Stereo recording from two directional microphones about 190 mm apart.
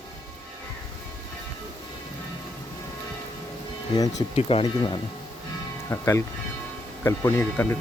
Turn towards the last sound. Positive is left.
turn(degrees=10)  # may be behind; listen again after turning